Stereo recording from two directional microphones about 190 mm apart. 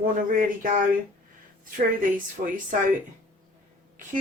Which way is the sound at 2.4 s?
55° right (ahead or behind).